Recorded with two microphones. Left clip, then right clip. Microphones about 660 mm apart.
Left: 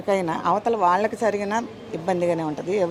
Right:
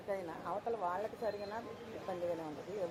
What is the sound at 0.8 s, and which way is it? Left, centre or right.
Speech, left.